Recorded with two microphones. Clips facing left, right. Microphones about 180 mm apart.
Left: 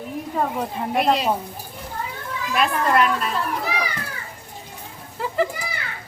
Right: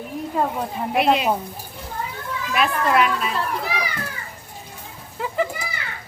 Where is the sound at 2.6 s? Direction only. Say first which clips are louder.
Even; 5° right (ahead or behind).